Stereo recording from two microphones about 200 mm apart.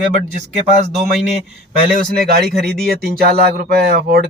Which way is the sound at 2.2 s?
50° right (ahead or behind).